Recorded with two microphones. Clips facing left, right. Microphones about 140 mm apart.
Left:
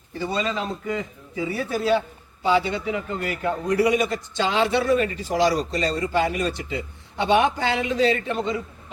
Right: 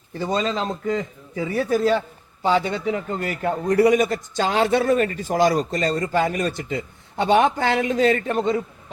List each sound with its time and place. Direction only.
0.2 s a man's voice: 40° right (ahead or behind)